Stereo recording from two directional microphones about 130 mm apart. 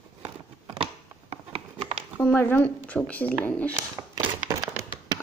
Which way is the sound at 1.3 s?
55° right (ahead or behind).